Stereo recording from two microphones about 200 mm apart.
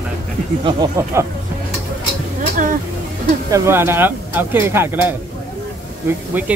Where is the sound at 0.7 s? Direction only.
20° right (ahead or behind).